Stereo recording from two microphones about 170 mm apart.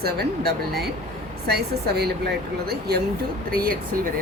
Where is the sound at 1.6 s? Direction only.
70° right (ahead or behind).